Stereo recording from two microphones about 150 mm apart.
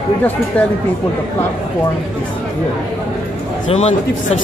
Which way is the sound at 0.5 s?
10° left (ahead or behind).